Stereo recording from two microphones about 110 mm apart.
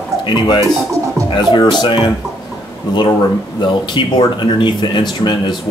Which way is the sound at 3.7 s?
50° left (ahead or behind).